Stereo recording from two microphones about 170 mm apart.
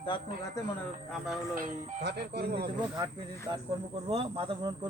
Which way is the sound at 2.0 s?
80° right.